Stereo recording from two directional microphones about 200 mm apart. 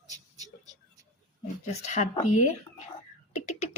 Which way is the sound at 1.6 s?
35° left (ahead or behind).